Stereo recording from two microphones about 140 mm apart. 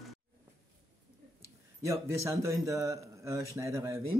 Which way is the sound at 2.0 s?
20° right (ahead or behind).